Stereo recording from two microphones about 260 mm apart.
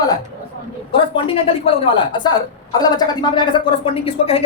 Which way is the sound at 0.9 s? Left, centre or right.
Centre.